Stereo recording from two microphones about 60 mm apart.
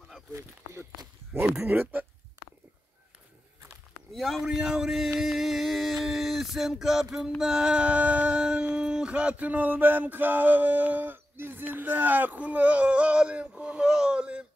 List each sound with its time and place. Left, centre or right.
0.3 s speech: right
1.7 s speech: right
4.1 s speech: centre
4.5 s speech: centre
5.2 s a sound: centre